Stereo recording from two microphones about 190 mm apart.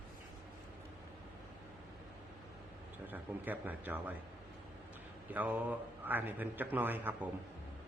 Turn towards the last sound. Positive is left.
turn(degrees=-10)  # may be behind; listen again after turning